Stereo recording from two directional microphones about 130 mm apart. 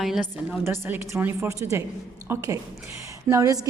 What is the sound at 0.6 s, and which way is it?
A woman's voice, 15° right (ahead or behind).